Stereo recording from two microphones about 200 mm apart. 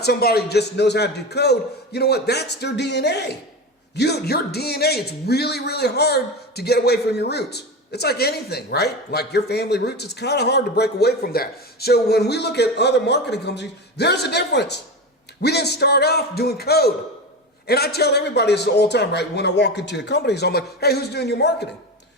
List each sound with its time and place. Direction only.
0.0 s a man's voice: 50° left (ahead or behind)